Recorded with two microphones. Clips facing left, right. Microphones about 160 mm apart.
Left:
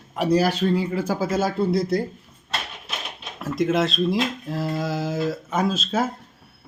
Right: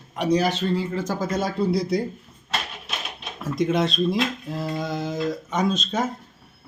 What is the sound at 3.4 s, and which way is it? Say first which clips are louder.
Speech: left 1 dB; centre (ahead or behind).